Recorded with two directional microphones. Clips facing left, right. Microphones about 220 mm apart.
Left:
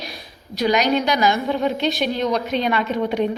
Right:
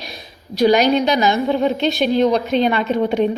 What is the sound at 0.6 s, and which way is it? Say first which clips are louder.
A woman's voice: right 5 dB; 30° right (ahead or behind).